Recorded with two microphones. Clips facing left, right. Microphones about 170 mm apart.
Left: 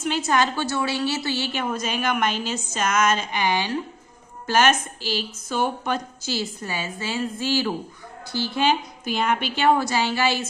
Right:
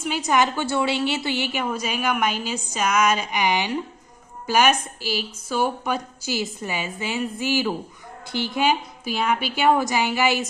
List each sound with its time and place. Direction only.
0.0 s a woman's voice: 10° right (ahead or behind)